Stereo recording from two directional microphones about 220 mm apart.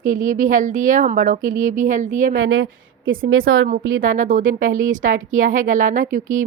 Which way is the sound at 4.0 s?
35° right (ahead or behind).